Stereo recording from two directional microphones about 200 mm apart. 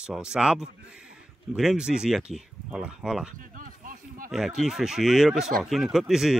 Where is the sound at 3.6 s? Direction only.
45° right (ahead or behind).